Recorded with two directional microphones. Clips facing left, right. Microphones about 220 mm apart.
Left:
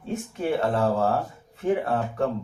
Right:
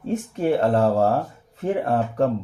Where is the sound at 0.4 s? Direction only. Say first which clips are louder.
Right 4 dB; 40° right (ahead or behind).